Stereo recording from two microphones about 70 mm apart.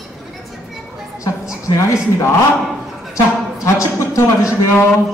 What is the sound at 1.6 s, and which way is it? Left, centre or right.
Speech, left.